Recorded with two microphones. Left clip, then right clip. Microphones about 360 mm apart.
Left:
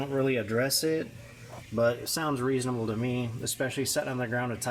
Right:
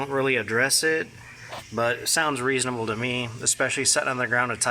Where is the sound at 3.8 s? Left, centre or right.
Right.